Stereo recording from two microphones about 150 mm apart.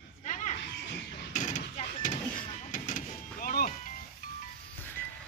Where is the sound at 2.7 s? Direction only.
60° left (ahead or behind).